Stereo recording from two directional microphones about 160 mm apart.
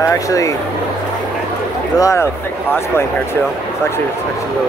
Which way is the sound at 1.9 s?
20° left (ahead or behind).